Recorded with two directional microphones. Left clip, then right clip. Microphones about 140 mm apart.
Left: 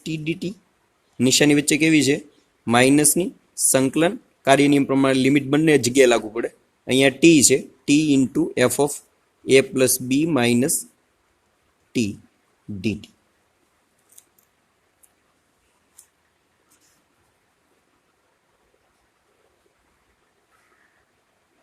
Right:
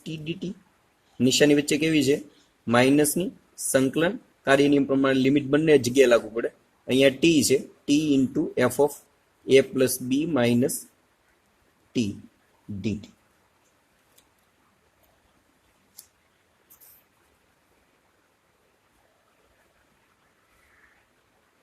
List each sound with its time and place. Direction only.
0.0 s speech: 90° left